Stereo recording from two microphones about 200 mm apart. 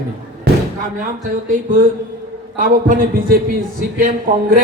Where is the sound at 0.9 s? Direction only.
40° right (ahead or behind).